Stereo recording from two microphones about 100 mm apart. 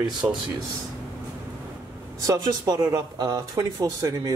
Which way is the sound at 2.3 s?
35° right (ahead or behind).